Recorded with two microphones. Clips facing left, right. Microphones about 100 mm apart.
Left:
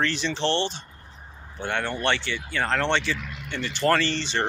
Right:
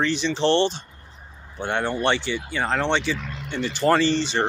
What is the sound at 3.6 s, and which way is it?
Speech, 30° right (ahead or behind).